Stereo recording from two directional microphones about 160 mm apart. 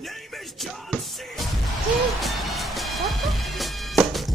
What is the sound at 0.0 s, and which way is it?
Music, centre (ahead or behind).